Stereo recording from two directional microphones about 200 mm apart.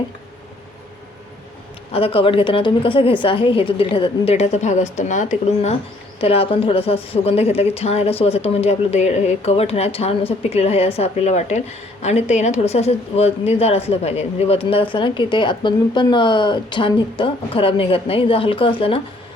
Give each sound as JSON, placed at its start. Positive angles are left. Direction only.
{"t": 1.9, "sound": "a woman's voice", "side_deg": 30}